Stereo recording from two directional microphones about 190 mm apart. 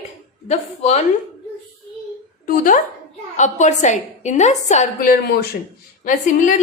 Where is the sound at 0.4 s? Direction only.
35° left (ahead or behind).